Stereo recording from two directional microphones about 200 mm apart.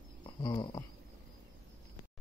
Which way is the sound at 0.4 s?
25° left (ahead or behind).